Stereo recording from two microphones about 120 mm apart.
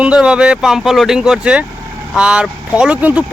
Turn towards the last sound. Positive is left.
turn(degrees=-10)  # may be behind; listen again after turning